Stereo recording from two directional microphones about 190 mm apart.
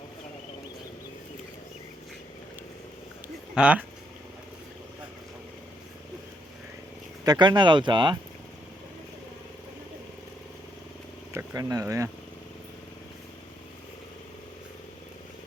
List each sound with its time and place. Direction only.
3.5 s speech: 5° right (ahead or behind)
7.3 s speech: 20° right (ahead or behind)
11.3 s speech: 15° right (ahead or behind)